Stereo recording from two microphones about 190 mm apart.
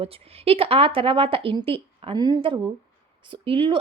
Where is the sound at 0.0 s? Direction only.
30° right (ahead or behind).